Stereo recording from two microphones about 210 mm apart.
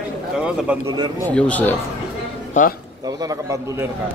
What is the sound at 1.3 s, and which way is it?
Speech, 5° left (ahead or behind).